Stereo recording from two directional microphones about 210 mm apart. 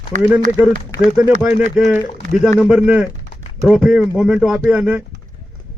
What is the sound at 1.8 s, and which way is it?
A man's voice, 5° right (ahead or behind).